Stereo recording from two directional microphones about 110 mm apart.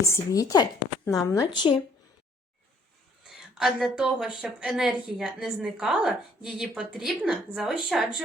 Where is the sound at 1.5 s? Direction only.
45° left (ahead or behind).